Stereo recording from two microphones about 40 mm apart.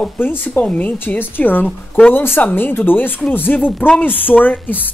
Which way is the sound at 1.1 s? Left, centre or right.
Left.